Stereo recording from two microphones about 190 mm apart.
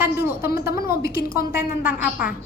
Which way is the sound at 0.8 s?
50° left (ahead or behind).